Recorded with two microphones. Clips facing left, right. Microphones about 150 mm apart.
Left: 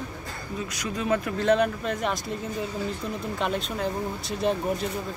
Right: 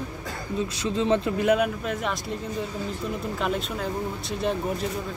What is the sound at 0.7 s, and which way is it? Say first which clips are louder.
Speech: right 3 dB; 25° right (ahead or behind).